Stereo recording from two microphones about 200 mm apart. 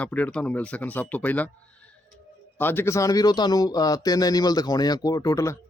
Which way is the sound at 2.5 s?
10° left (ahead or behind).